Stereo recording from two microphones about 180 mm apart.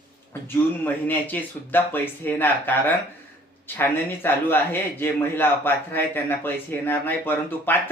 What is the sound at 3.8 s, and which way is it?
Speech, 10° left (ahead or behind).